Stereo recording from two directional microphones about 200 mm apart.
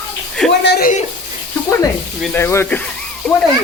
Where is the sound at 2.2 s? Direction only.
10° left (ahead or behind).